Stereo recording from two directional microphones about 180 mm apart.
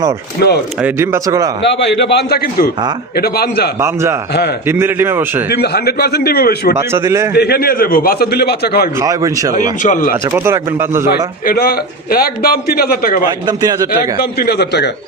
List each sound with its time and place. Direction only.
0.8 s speech: 10° right (ahead or behind)
1.6 s a man's voice: 75° left (ahead or behind)
3.8 s speech: 15° right (ahead or behind)
5.5 s a man's voice: 60° left (ahead or behind)
6.7 s speech: 15° right (ahead or behind)
7.3 s a man's voice: 60° left (ahead or behind)
9.0 s speech: 20° right (ahead or behind)
9.8 s speech: 45° left (ahead or behind)
10.3 s speech: 15° right (ahead or behind)
11.4 s a man's voice: 55° left (ahead or behind)
13.5 s a man's voice: 20° right (ahead or behind)
13.9 s a man's voice: 60° left (ahead or behind)